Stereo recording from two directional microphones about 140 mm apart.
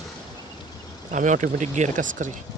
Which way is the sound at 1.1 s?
65° right (ahead or behind).